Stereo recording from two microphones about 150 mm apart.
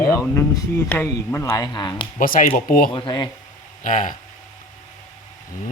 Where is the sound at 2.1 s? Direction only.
70° left (ahead or behind).